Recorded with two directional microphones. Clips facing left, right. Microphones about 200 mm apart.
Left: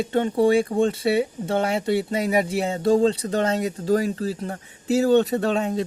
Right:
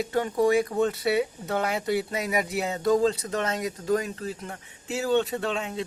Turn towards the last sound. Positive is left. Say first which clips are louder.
# left 7 dB
turn(degrees=40)  # may be behind; listen again after turning